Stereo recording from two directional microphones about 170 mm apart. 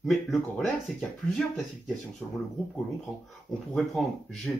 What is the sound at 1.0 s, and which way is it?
Speech, 5° left (ahead or behind).